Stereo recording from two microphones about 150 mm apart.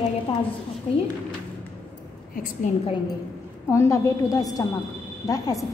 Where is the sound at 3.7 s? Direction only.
20° left (ahead or behind).